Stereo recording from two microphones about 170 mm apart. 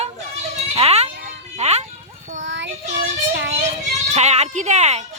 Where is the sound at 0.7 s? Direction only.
35° right (ahead or behind).